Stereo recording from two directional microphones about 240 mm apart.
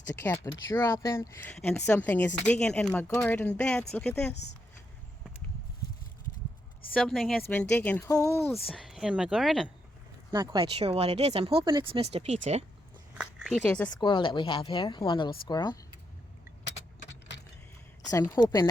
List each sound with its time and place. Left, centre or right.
0.2 s speech: centre
6.9 s speech: centre
8.7 s speech: centre
10.3 s speech: centre
13.1 s speech: centre
14.0 s a woman's voice: left
16.6 s keys jangling: left
18.1 s speech: centre